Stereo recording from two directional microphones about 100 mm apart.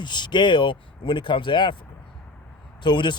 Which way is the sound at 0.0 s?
50° left (ahead or behind).